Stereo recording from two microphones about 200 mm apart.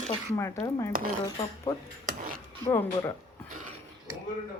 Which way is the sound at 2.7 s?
10° left (ahead or behind).